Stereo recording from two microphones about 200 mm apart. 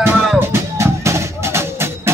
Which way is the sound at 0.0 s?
5° right (ahead or behind).